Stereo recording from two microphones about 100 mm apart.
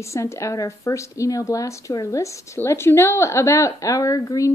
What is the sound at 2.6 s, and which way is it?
Speech, 25° left (ahead or behind).